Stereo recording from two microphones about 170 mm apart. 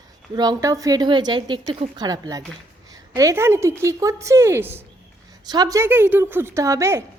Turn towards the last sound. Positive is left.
turn(degrees=-15)  # may be behind; listen again after turning